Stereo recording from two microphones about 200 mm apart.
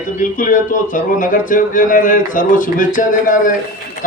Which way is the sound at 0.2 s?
40° left (ahead or behind).